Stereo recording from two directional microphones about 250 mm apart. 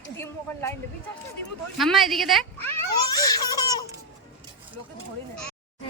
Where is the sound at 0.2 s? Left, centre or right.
Centre.